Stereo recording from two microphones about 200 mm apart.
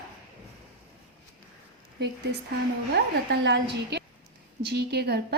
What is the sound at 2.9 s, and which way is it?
A woman's voice, 60° right (ahead or behind).